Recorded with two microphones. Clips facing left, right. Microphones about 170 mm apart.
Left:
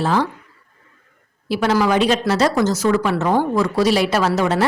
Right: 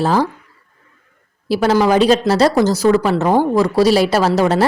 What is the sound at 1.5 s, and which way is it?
A woman's voice, 35° right (ahead or behind).